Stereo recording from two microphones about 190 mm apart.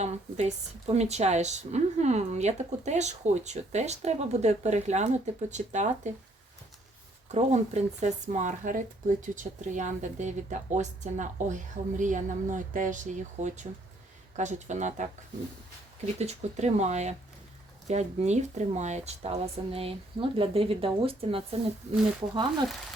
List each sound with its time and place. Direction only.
0.0 s speech: 35° right (ahead or behind)
7.3 s speech: 35° right (ahead or behind)
16.1 s speech: 35° right (ahead or behind)